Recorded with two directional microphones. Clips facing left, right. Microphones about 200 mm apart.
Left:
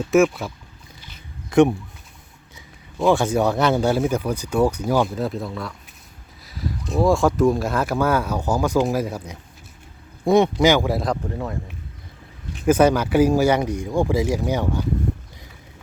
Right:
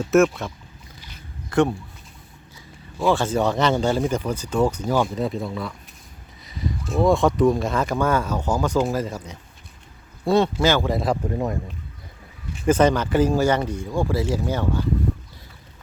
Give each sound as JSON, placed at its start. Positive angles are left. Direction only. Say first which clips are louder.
{"t": 0.0, "sound": "speech", "louder": "even", "side_deg": 0}
{"t": 1.5, "sound": "a sound", "louder": "left 4 dB", "side_deg": 15}
{"t": 3.1, "sound": "speech", "louder": "left 2 dB", "side_deg": 10}
{"t": 12.6, "sound": "speech", "louder": "left 2 dB", "side_deg": 10}